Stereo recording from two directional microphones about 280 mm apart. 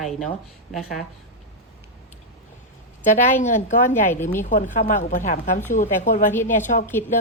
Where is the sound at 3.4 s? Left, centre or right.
Left.